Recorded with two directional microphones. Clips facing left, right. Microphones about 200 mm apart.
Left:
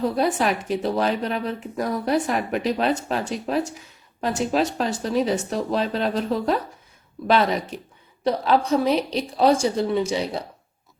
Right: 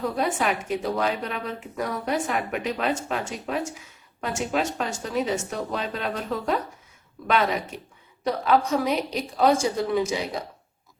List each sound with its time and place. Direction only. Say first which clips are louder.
0.2 s speech: left 3 dB; 30° left (ahead or behind)
8.2 s speech: left 2 dB; 30° left (ahead or behind)